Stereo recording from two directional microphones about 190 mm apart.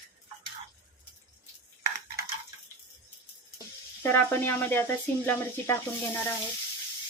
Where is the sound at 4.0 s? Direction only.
10° left (ahead or behind).